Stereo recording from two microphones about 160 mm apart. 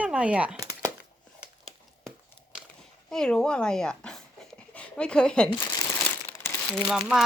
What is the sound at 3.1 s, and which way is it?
A woman's voice, 5° left (ahead or behind).